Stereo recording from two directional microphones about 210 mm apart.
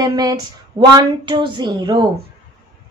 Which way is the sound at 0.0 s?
20° right (ahead or behind).